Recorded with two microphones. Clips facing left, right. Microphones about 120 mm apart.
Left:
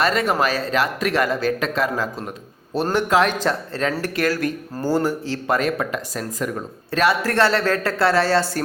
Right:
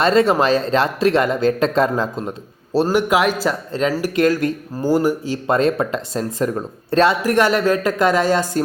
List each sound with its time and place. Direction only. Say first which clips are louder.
0.0 s speech: right 5 dB; 25° right (ahead or behind)
2.8 s speech: right 1 dB; 10° right (ahead or behind)
5.5 s speech: right 5 dB; 25° right (ahead or behind)